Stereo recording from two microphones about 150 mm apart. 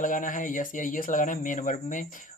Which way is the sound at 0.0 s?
60° left (ahead or behind).